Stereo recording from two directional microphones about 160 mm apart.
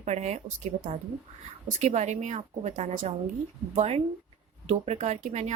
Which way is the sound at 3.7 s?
40° right (ahead or behind).